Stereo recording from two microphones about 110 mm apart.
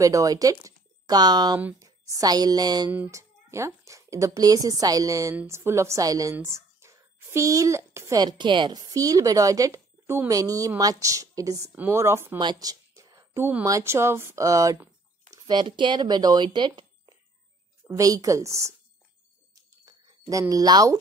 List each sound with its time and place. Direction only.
0.0 s speech: 30° right (ahead or behind)
5.3 s a woman's voice: 20° right (ahead or behind)
11.7 s speech: 20° right (ahead or behind)
12.4 s a sound: 40° right (ahead or behind)
13.7 s speech: 25° right (ahead or behind)
15.3 s speech: 40° right (ahead or behind)
17.8 s speech: 30° right (ahead or behind)
19.5 s a sound: 30° right (ahead or behind)